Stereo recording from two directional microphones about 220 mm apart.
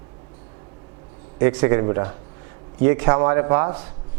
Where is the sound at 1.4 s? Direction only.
20° right (ahead or behind).